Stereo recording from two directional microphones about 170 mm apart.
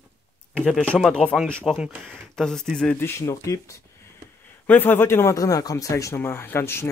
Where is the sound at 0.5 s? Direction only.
Centre (ahead or behind).